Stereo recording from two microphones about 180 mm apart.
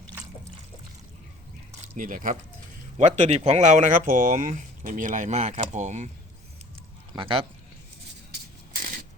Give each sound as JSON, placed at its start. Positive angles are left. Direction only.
{"t": 2.0, "sound": "speech", "side_deg": -50}
{"t": 7.1, "sound": "speech", "side_deg": -30}
{"t": 8.3, "sound": "a sound", "side_deg": -50}